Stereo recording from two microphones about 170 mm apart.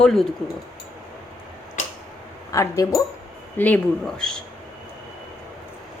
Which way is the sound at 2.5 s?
20° left (ahead or behind).